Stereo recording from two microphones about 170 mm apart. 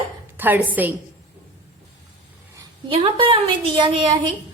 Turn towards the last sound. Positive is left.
turn(degrees=-30)  # may be behind; listen again after turning